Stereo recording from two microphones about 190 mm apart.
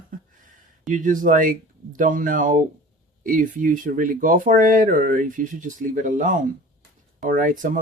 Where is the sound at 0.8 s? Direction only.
45° right (ahead or behind).